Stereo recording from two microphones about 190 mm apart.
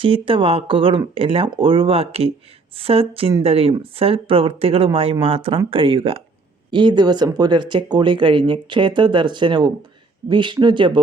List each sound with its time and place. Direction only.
0.0 s speech: 25° right (ahead or behind)